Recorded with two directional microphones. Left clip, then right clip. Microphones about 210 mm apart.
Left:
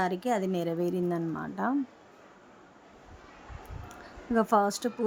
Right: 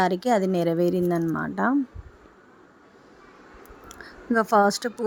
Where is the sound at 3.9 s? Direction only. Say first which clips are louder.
Right 5 dB; 25° right (ahead or behind).